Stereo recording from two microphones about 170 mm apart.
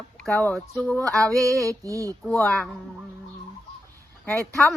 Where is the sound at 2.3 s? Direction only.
10° left (ahead or behind).